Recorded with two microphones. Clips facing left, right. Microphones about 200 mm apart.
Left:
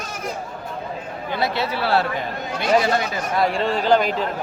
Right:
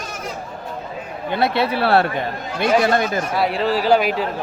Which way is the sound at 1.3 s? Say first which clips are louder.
Right 4 dB; 60° right (ahead or behind).